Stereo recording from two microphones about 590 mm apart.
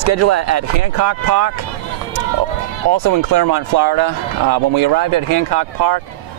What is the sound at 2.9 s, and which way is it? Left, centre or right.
Speech, right.